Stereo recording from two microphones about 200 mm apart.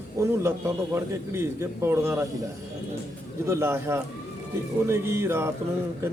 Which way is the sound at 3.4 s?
10° right (ahead or behind).